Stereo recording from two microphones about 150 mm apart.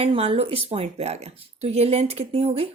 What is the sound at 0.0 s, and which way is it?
A woman's voice, 40° right (ahead or behind).